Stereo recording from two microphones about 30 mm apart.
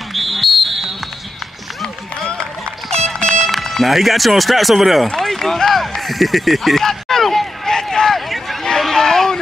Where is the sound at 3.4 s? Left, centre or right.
Centre.